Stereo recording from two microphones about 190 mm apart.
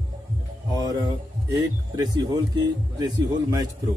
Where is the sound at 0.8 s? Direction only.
20° right (ahead or behind).